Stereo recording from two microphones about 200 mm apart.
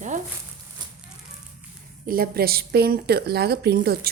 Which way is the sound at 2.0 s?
45° right (ahead or behind).